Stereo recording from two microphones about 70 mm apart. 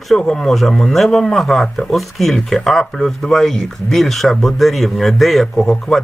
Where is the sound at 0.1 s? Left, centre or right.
Centre.